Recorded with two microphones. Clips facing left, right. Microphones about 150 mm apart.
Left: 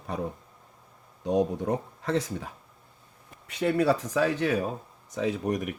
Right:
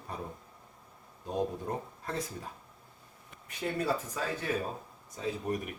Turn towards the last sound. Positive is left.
turn(degrees=80)